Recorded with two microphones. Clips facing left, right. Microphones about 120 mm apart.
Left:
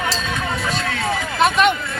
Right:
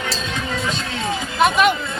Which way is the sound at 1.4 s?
Centre (ahead or behind).